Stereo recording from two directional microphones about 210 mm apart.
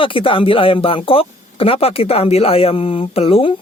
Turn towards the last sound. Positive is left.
turn(degrees=25)  # may be behind; listen again after turning